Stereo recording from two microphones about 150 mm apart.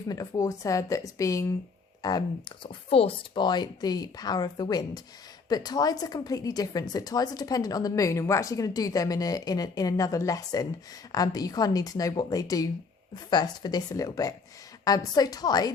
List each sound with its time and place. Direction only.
0.1 s a woman's voice: 25° left (ahead or behind)
2.6 s a woman's voice: 40° left (ahead or behind)